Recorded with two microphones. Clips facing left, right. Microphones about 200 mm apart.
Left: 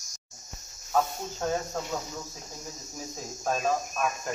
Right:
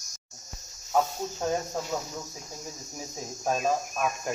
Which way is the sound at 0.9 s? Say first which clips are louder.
Right 1 dB; 10° right (ahead or behind).